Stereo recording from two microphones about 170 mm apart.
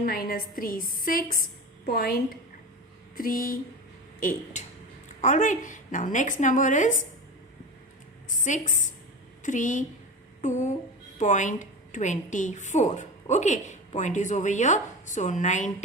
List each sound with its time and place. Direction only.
0.0 s a woman's voice: 60° left (ahead or behind)
3.2 s a woman's voice: 55° left (ahead or behind)
8.3 s a woman's voice: 50° left (ahead or behind)